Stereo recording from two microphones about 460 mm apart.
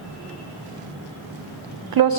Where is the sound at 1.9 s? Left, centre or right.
Right.